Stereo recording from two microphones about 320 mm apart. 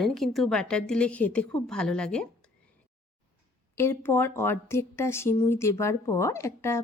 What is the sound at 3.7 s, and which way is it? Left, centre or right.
A woman's voice, centre.